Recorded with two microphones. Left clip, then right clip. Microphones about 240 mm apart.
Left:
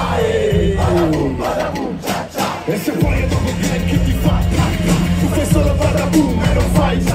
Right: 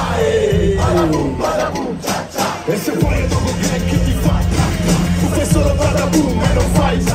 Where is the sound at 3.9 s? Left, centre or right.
Centre.